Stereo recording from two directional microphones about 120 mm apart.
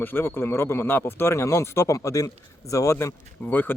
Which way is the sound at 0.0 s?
15° left (ahead or behind).